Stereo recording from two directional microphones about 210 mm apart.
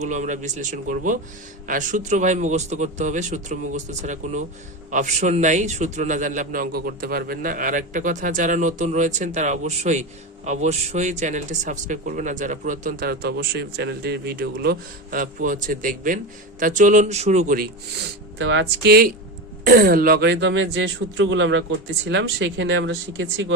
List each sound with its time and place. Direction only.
0.0 s a man's voice: 35° right (ahead or behind)
18.3 s speech: 60° right (ahead or behind)